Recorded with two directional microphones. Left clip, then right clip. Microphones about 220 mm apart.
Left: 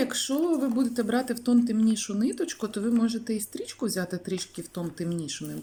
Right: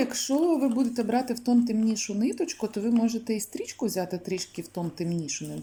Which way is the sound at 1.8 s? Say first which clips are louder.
Left 1 dB; 20° right (ahead or behind).